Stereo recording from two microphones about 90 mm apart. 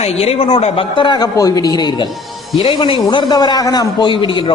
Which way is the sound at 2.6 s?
80° left.